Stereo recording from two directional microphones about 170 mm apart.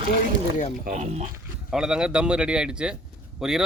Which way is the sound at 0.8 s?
45° right (ahead or behind).